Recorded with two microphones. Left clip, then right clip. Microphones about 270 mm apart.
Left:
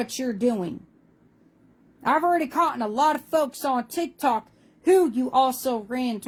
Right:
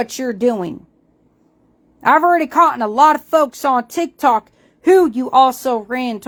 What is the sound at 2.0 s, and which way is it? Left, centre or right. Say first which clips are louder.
Speech: right 9 dB; right.